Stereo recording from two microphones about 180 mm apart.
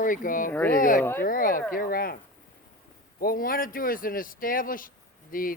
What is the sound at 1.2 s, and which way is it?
Speech, 50° left (ahead or behind).